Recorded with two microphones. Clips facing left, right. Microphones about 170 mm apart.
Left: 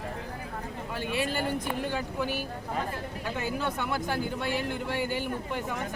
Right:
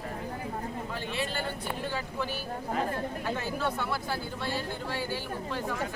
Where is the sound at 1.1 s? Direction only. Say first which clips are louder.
Left 6 dB; 15° left (ahead or behind).